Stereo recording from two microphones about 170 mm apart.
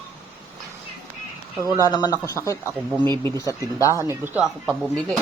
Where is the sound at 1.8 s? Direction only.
20° left (ahead or behind).